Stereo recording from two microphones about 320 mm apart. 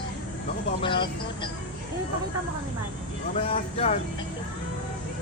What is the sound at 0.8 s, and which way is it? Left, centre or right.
Speech, centre.